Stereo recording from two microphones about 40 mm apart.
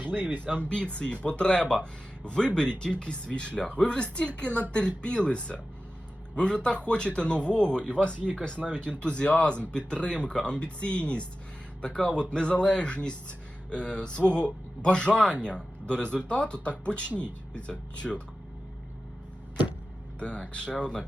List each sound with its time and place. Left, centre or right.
0.0 s speech: right
0.6 s speech: left
20.1 s speech: left